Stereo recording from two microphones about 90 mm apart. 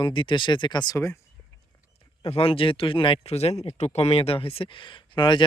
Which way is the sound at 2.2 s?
90° left.